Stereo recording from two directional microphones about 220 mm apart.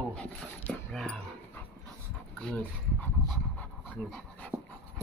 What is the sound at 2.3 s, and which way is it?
Pant, 5° left (ahead or behind).